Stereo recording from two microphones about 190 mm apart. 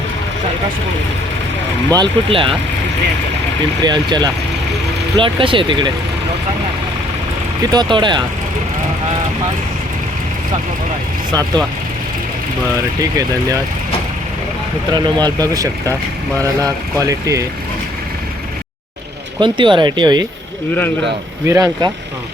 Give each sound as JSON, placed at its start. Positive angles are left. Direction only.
{"t": 2.0, "sound": "speech", "side_deg": -25}
{"t": 3.8, "sound": "speech", "side_deg": -20}
{"t": 7.7, "sound": "speech", "side_deg": -25}
{"t": 11.3, "sound": "speech", "side_deg": -20}
{"t": 13.0, "sound": "speech", "side_deg": -20}
{"t": 14.9, "sound": "speech", "side_deg": -20}
{"t": 19.4, "sound": "speech", "side_deg": -25}
{"t": 21.4, "sound": "speech", "side_deg": -15}